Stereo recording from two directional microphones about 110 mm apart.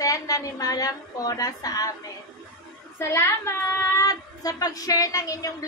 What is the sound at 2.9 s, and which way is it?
Speech, 25° left (ahead or behind).